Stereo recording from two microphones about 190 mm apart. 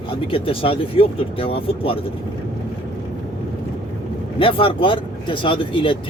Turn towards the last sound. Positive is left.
turn(degrees=25)  # may be behind; listen again after turning